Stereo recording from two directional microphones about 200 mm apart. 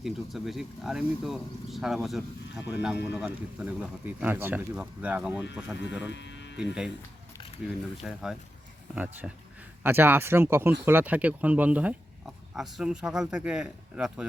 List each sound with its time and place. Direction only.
0.0 s speech: centre (ahead or behind)
6.1 s a sound: 60° left (ahead or behind)
6.6 s speech: 5° right (ahead or behind)
8.0 s speech: centre (ahead or behind)